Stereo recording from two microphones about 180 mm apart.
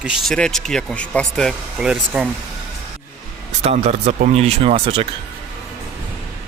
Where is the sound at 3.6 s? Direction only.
35° right (ahead or behind).